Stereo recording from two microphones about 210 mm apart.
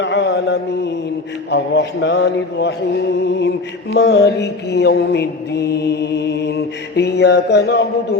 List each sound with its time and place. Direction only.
0.0 s mantra: 55° left (ahead or behind)